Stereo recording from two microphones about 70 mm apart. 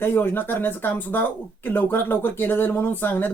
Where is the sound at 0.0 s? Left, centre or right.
Left.